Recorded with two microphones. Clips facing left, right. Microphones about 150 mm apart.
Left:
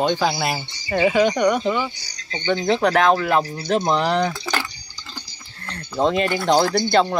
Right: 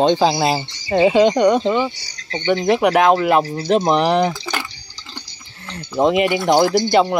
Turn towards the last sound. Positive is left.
turn(degrees=-15)  # may be behind; listen again after turning